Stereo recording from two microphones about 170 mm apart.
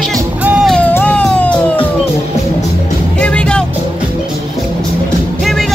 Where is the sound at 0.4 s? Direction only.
10° right (ahead or behind).